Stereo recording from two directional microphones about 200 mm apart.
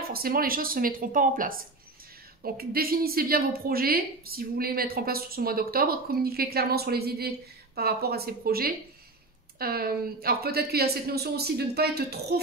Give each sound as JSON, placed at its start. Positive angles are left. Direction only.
{"t": 0.1, "sound": "a woman's voice", "side_deg": -45}